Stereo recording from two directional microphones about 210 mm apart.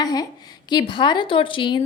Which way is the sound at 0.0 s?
15° left (ahead or behind).